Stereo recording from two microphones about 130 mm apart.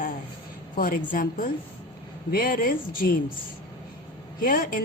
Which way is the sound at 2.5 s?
90° left.